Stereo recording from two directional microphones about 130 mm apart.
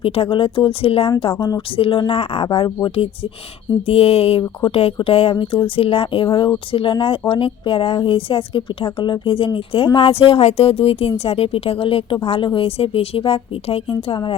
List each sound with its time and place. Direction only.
0.0 s speech: 45° left (ahead or behind)
3.8 s speech: 50° left (ahead or behind)